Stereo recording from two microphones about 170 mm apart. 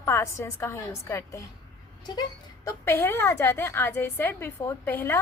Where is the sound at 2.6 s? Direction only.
15° left (ahead or behind).